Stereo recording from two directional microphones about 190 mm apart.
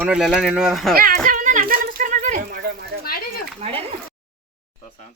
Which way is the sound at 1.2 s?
45° right (ahead or behind).